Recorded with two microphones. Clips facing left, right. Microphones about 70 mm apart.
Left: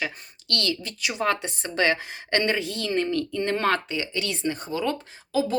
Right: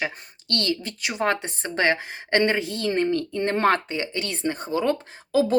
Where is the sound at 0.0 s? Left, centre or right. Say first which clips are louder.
Right 2 dB; right.